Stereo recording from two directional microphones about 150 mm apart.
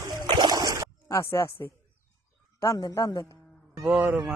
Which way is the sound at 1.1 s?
20° left (ahead or behind).